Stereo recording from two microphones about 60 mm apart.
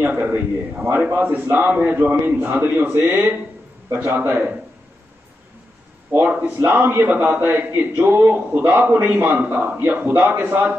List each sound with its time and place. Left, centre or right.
0.0 s a man's voice: right
6.1 s a man's voice: right